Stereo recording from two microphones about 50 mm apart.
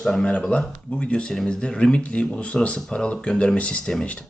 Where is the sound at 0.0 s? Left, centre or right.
Centre.